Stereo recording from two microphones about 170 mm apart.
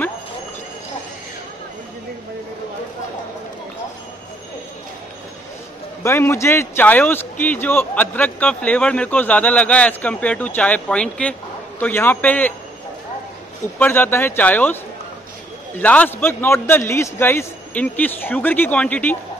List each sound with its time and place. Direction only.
6.0 s a man's voice: 15° left (ahead or behind)
13.7 s a man's voice: 10° left (ahead or behind)
15.8 s a man's voice: 10° left (ahead or behind)